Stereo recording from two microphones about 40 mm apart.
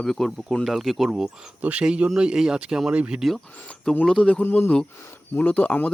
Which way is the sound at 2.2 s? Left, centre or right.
Centre.